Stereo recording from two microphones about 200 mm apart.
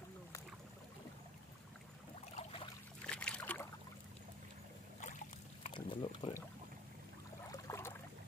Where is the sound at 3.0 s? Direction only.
5° left (ahead or behind).